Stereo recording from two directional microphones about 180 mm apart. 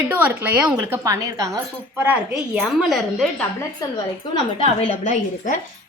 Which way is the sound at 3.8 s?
20° left (ahead or behind).